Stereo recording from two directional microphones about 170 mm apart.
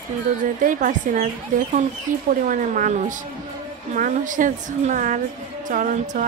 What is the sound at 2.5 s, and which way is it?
A woman's voice, 50° right (ahead or behind).